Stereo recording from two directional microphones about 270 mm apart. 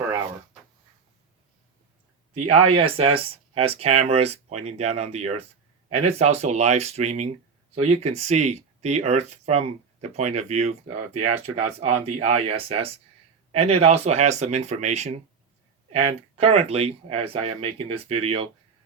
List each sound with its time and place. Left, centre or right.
2.6 s speech: right